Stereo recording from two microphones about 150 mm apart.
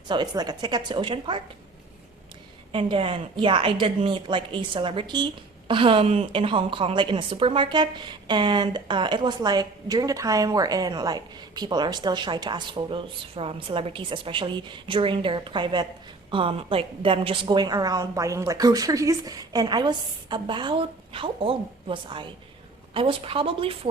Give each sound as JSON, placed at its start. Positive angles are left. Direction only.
{"t": 0.1, "sound": "a woman's voice", "side_deg": -30}
{"t": 2.7, "sound": "a woman's voice", "side_deg": -35}